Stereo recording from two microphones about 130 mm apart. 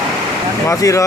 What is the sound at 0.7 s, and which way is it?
Speech, 25° left (ahead or behind).